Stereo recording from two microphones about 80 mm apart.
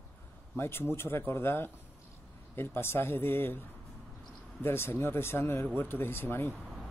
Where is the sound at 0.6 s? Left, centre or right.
Left.